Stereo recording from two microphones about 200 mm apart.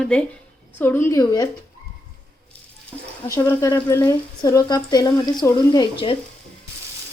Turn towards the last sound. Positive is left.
turn(degrees=25)  # may be behind; listen again after turning